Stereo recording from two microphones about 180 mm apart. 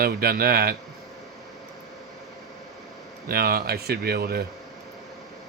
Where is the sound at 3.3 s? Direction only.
55° right (ahead or behind).